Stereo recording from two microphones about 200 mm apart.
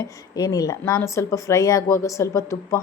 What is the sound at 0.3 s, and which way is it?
Speech, 20° left (ahead or behind).